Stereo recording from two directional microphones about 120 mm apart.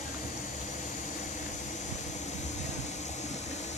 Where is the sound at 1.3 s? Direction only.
75° left (ahead or behind).